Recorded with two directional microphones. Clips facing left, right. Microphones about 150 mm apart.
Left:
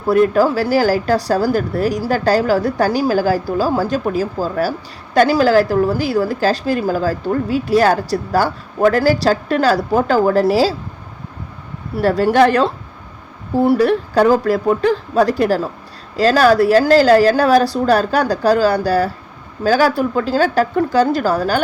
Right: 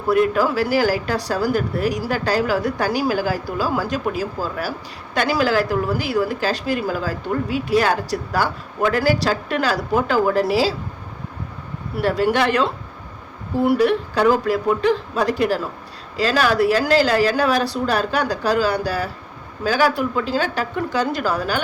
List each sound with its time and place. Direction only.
0.1 s speech: 35° left (ahead or behind)
11.9 s speech: 35° left (ahead or behind)